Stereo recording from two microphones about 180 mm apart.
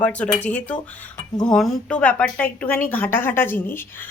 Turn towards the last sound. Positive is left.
turn(degrees=10)  # may be behind; listen again after turning